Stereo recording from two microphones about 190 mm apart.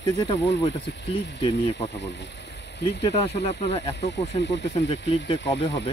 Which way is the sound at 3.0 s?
35° left (ahead or behind).